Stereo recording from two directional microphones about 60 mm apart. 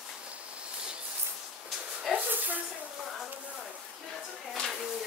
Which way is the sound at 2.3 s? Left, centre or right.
Right.